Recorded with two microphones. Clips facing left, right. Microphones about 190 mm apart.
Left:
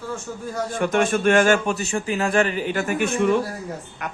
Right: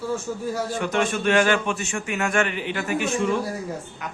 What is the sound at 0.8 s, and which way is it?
A man's voice, 50° left (ahead or behind).